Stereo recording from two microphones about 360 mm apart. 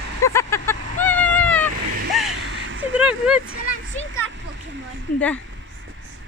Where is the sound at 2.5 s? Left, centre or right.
Right.